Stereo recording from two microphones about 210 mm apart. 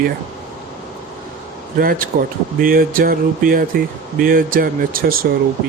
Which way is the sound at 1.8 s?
45° right (ahead or behind).